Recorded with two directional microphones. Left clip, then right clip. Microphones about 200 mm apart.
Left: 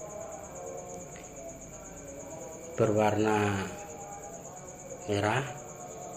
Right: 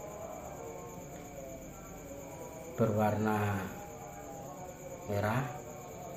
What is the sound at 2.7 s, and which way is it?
Speech, 40° left (ahead or behind).